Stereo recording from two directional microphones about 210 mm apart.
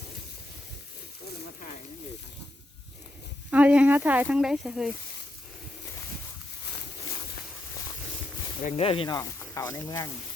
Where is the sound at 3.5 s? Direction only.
5° right (ahead or behind).